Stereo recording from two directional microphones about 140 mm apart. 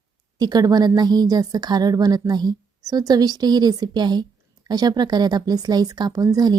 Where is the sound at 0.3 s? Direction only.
30° right (ahead or behind).